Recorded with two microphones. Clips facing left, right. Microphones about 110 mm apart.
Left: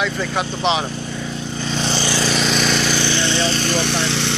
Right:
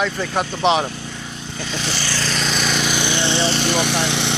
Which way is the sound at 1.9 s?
15° left (ahead or behind).